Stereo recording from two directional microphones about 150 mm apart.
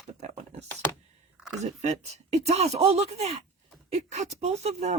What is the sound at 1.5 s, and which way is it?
Speech, 50° right (ahead or behind).